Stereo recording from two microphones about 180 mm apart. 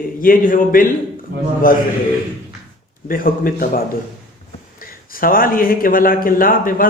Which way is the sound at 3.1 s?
50° left (ahead or behind).